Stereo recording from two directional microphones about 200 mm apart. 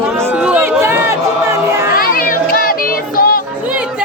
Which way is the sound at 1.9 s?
45° left (ahead or behind).